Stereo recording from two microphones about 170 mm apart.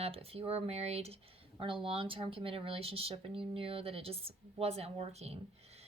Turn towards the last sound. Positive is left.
turn(degrees=-35)  # may be behind; listen again after turning